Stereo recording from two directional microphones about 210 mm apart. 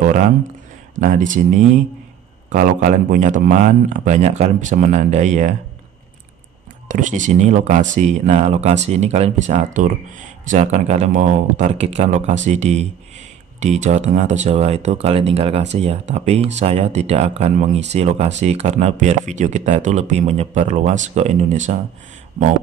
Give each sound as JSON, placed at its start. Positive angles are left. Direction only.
{"t": 0.0, "sound": "a sound", "side_deg": -40}
{"t": 0.9, "sound": "speech", "side_deg": -35}
{"t": 6.9, "sound": "speech", "side_deg": -35}